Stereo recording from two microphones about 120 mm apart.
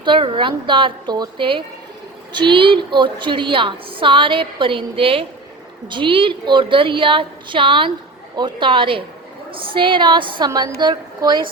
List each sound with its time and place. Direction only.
0.0 s a woman's voice: 45° right (ahead or behind)